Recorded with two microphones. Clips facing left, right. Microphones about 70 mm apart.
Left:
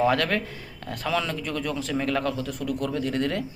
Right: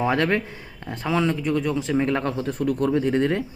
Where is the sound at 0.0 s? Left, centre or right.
Right.